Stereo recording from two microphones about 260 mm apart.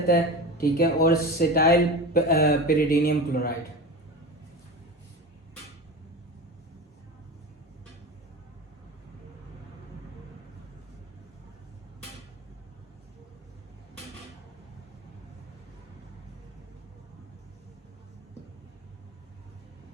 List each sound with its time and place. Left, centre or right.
0.1 s speech: left